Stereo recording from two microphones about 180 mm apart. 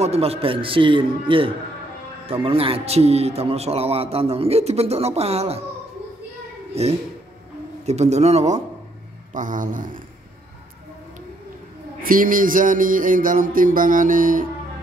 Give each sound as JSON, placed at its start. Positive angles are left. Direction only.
{"t": 0.0, "sound": "a man's voice", "side_deg": -35}
{"t": 6.7, "sound": "a man's voice", "side_deg": -35}
{"t": 9.3, "sound": "music", "side_deg": -45}
{"t": 12.0, "sound": "music", "side_deg": -50}